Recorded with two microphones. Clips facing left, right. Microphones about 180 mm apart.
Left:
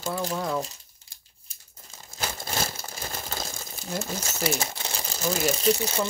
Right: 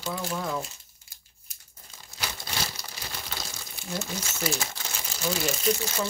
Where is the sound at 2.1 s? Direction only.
45° left (ahead or behind).